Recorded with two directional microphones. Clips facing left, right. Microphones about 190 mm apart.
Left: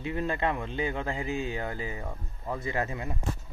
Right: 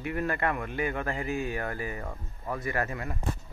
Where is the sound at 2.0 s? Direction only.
5° left (ahead or behind).